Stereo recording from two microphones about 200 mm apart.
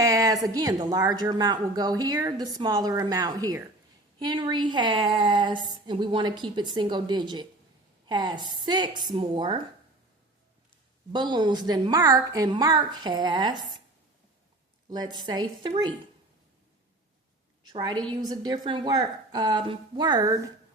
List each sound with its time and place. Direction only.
0.0 s a woman's voice: 15° right (ahead or behind)
11.1 s a woman's voice: 20° right (ahead or behind)
14.8 s a woman's voice: 20° right (ahead or behind)
17.7 s a woman's voice: 20° right (ahead or behind)